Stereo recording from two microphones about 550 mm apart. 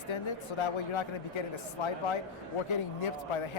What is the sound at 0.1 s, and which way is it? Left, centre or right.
Speech, left.